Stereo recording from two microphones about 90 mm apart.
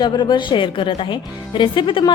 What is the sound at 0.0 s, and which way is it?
Speech, 55° left (ahead or behind).